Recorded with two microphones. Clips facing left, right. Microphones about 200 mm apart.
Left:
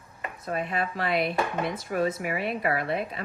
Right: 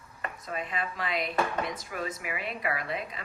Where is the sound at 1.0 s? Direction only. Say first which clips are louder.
Left 3 dB; 60° left (ahead or behind).